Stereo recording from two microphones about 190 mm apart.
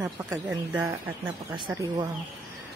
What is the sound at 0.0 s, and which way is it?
Speech, 15° right (ahead or behind).